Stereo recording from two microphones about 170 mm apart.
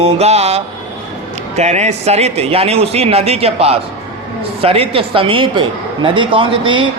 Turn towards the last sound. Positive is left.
turn(degrees=-30)  # may be behind; listen again after turning